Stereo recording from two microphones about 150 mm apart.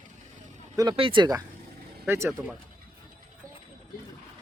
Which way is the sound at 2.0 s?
20° right (ahead or behind).